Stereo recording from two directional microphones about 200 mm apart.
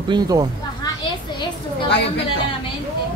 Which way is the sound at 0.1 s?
20° right (ahead or behind).